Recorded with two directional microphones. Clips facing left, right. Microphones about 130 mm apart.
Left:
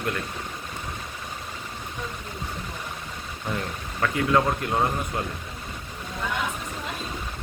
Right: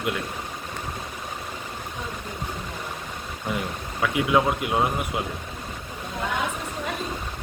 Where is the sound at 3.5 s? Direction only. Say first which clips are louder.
Even; 10° right (ahead or behind).